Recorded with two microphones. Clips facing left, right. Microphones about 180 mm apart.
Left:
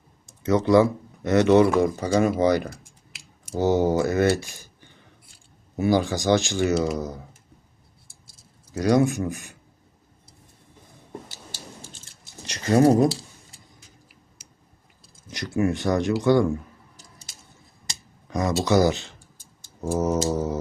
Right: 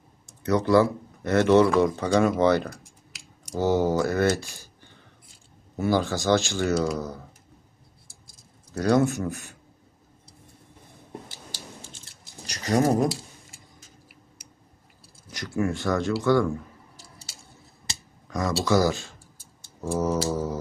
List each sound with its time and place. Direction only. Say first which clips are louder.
0.4 s speech: left 2 dB; 20° left (ahead or behind)
8.7 s speech: left 1 dB; 15° left (ahead or behind)
12.5 s speech: left 5 dB; 25° left (ahead or behind)
15.3 s speech: left 3 dB; 20° left (ahead or behind)
18.3 s speech: left 2 dB; 20° left (ahead or behind)